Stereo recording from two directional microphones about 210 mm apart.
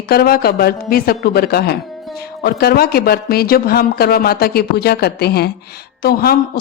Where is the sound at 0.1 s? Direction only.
45° left (ahead or behind).